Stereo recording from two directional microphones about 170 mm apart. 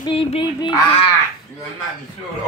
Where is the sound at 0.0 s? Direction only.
30° left (ahead or behind).